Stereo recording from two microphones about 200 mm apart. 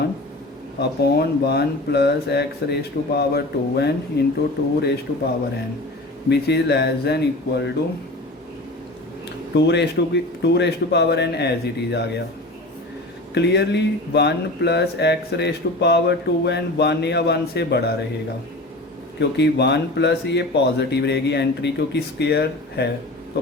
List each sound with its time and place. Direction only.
0.8 s speech: 55° left (ahead or behind)
6.2 s speech: 55° left (ahead or behind)
9.6 s speech: 60° left (ahead or behind)
13.3 s speech: 60° left (ahead or behind)
19.2 s speech: 60° left (ahead or behind)